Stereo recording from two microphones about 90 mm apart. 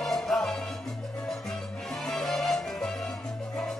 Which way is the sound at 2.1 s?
Centre (ahead or behind).